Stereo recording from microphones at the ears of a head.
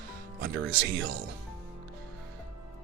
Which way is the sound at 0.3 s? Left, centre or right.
Right.